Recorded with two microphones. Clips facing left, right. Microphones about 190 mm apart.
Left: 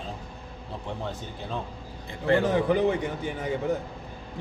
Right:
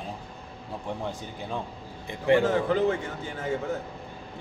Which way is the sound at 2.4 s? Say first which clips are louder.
Left 1 dB; 15° left (ahead or behind).